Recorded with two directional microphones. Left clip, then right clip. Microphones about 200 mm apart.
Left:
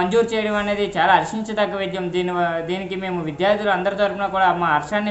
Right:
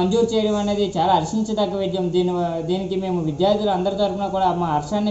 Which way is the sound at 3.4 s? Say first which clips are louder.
Left 1 dB; 5° left (ahead or behind).